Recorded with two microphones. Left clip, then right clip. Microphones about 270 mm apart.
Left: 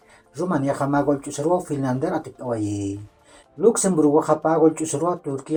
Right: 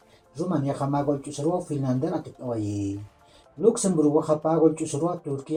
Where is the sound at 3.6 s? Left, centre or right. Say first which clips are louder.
Left 4 dB; left.